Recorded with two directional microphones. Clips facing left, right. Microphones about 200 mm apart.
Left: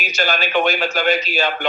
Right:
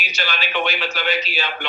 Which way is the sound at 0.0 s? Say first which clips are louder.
Left 6 dB; 45° left (ahead or behind).